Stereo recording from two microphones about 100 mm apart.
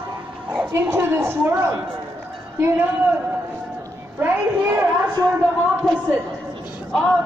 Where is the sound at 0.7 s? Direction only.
25° right (ahead or behind).